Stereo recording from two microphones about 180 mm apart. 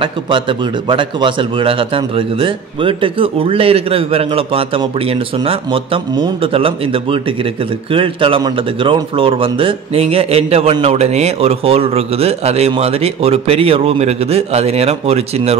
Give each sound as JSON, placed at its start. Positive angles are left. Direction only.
{"t": 0.0, "sound": "a man's voice", "side_deg": -25}